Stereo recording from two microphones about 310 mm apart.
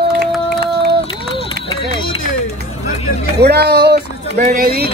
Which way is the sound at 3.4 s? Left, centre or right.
Right.